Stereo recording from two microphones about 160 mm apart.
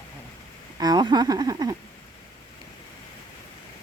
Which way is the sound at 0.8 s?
25° right (ahead or behind).